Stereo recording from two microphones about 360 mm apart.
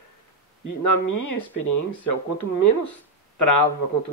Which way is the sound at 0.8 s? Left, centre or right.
Left.